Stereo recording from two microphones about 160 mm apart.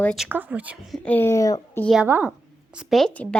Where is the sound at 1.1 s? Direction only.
15° left (ahead or behind).